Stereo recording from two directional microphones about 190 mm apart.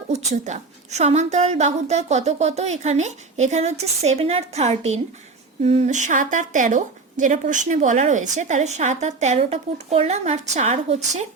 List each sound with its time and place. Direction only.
0.1 s a woman's voice: 35° right (ahead or behind)